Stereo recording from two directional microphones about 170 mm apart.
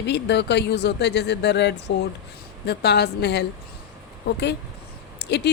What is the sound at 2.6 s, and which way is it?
A woman's voice, 70° left (ahead or behind).